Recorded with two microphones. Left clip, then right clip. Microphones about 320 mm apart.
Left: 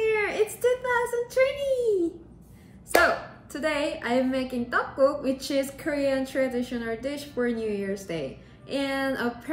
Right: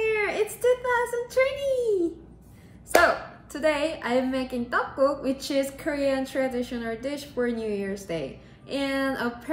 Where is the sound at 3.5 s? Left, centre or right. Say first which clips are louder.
Right 2 dB; centre.